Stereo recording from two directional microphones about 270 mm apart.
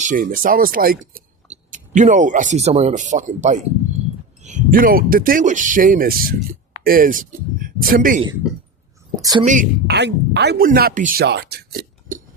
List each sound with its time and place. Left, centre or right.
0.0 s speech: right
9.5 s speech: right